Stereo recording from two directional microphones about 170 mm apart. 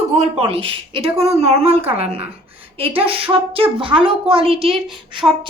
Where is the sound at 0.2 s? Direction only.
35° right (ahead or behind).